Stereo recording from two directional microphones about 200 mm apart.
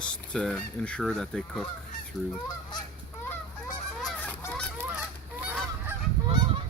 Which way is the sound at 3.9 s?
5° left (ahead or behind).